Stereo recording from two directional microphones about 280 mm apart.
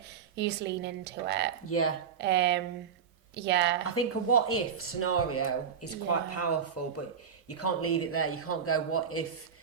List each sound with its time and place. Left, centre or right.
0.3 s a woman's voice: right
1.6 s speech: left
2.1 s a woman's voice: right
3.8 s speech: left